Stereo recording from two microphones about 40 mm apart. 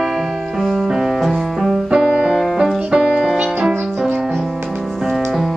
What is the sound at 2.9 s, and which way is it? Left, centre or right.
Music, right.